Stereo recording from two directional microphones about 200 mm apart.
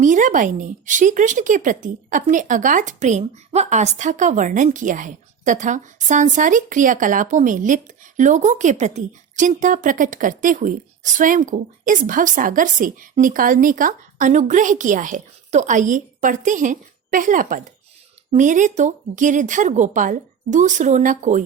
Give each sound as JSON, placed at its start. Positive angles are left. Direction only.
{"t": 0.0, "sound": "speech", "side_deg": -40}